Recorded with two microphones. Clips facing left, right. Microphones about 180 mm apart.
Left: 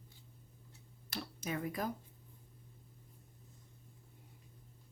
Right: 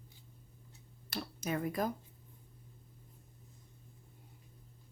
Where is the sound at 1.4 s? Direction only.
45° right (ahead or behind).